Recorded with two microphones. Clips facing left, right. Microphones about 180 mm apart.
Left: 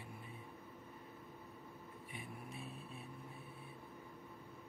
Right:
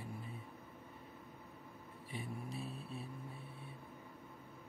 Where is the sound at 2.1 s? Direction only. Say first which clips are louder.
Right 6 dB; 30° right (ahead or behind).